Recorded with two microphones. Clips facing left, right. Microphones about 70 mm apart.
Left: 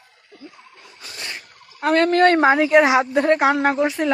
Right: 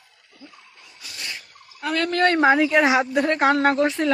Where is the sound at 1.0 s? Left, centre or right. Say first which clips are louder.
Left 2 dB; left.